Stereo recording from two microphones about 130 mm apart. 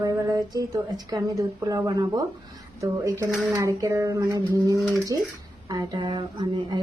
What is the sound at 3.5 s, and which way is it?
A woman's voice, 25° right (ahead or behind).